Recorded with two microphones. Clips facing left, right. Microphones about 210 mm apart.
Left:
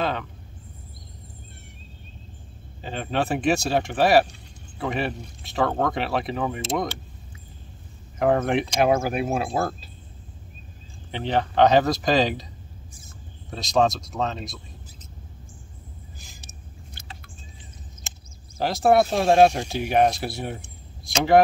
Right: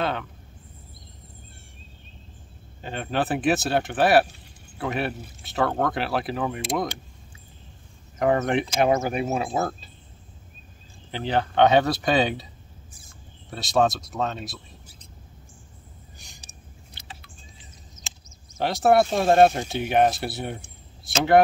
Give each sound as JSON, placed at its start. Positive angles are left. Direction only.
{"t": 0.0, "sound": "speech", "side_deg": 0}
{"t": 2.8, "sound": "speech", "side_deg": 0}
{"t": 8.2, "sound": "speech", "side_deg": 0}
{"t": 11.1, "sound": "speech", "side_deg": 0}
{"t": 13.5, "sound": "speech", "side_deg": -5}
{"t": 16.2, "sound": "a sound", "side_deg": 0}
{"t": 17.0, "sound": "vehicle", "side_deg": 50}
{"t": 18.6, "sound": "speech", "side_deg": 0}